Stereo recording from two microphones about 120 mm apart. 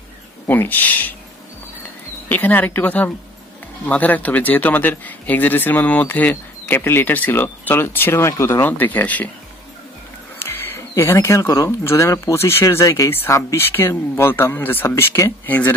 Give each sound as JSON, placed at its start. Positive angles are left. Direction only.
{"t": 0.5, "sound": "speech", "side_deg": 15}
{"t": 2.2, "sound": "speech", "side_deg": 15}
{"t": 10.4, "sound": "speech", "side_deg": 20}